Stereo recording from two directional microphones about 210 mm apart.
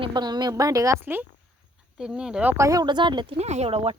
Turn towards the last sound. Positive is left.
turn(degrees=-25)  # may be behind; listen again after turning